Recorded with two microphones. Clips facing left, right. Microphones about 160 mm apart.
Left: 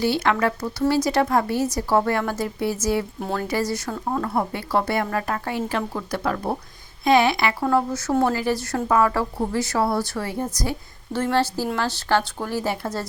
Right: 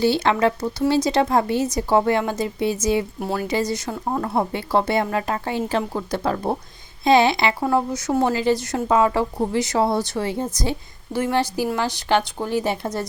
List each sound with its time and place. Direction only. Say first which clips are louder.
0.0 s speech: right 3 dB; 25° right (ahead or behind)
3.2 s a woman's voice: right 2 dB; 5° right (ahead or behind)
3.4 s a woman's voice: right 1 dB; 20° right (ahead or behind)